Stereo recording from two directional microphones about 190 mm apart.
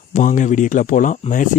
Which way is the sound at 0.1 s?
40° left (ahead or behind).